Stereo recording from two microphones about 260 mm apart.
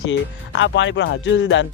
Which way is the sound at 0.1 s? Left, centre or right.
Left.